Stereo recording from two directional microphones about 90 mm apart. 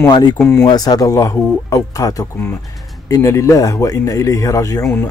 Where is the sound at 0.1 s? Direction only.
50° left (ahead or behind).